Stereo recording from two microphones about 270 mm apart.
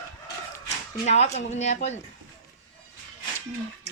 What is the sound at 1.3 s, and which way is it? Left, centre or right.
Speech, left.